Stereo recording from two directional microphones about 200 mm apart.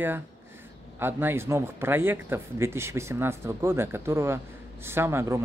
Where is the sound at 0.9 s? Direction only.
10° right (ahead or behind).